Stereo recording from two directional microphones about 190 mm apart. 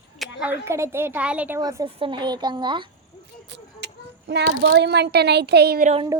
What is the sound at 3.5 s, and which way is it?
A child's voice, 65° right (ahead or behind).